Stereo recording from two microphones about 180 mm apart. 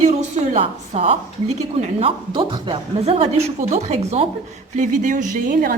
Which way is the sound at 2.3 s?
25° right (ahead or behind).